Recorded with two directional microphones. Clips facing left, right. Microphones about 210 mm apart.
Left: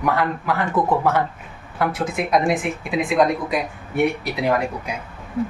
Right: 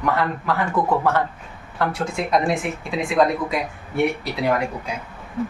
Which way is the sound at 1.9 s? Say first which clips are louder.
Left 1 dB; 20° left (ahead or behind).